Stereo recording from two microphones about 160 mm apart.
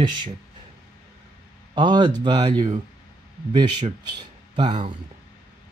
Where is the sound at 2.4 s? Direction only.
40° right (ahead or behind).